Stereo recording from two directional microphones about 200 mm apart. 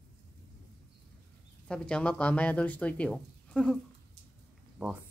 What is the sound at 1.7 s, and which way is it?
Speech, 5° left (ahead or behind).